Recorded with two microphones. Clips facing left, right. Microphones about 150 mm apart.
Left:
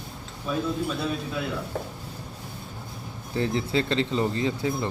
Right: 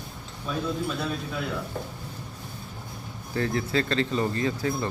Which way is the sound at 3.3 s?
20° left (ahead or behind).